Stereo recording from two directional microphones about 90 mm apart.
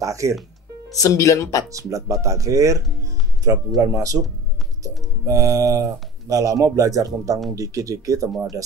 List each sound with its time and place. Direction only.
0.0 s speech: 35° right (ahead or behind)
0.9 s speech: 35° left (ahead or behind)
1.9 s speech: 35° right (ahead or behind)